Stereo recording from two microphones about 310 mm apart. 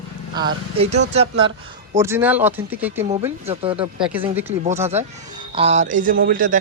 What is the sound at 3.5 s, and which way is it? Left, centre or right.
Speech, centre.